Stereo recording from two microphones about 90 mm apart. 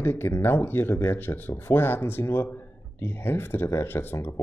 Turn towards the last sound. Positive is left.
turn(degrees=25)  # may be behind; listen again after turning